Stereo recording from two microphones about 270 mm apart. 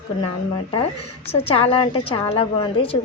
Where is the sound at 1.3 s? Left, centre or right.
Left.